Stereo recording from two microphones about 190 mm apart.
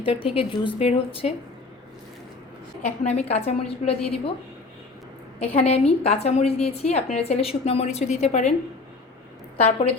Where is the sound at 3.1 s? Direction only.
35° left (ahead or behind).